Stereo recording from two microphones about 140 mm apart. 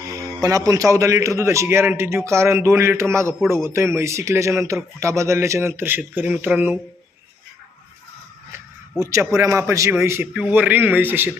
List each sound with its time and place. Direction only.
0.2 s a man's voice: 25° right (ahead or behind)
8.5 s speech: 20° right (ahead or behind)